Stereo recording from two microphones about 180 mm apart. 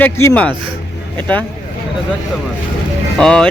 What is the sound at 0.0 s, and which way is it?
Speech, 15° left (ahead or behind).